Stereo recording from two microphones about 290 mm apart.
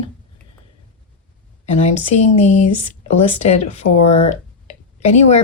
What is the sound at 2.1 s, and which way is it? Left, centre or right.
Speech, left.